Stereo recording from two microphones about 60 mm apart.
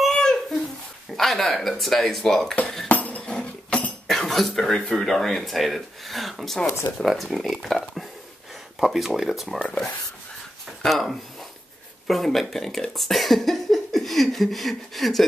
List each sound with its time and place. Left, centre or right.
0.0 s a sound: centre
1.1 s speech: centre
2.9 s chink: left
4.1 s speech: centre
6.6 s speech: left
7.0 s speech: centre
10.8 s speech: centre